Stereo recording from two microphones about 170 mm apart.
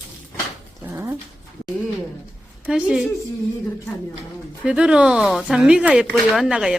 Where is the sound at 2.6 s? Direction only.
5° right (ahead or behind).